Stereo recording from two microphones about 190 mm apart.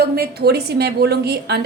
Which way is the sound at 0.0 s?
55° right (ahead or behind).